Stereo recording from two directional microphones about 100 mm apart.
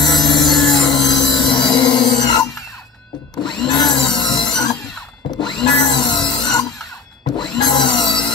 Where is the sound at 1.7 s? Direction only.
45° left (ahead or behind).